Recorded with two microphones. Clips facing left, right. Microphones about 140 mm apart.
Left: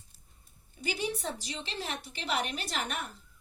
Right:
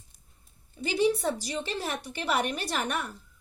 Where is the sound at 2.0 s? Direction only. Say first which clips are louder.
Right 5 dB; 55° right (ahead or behind).